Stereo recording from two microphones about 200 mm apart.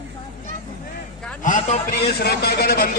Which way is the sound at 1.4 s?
40° left (ahead or behind).